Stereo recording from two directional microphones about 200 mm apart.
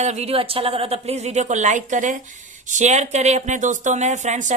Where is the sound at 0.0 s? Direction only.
35° right (ahead or behind).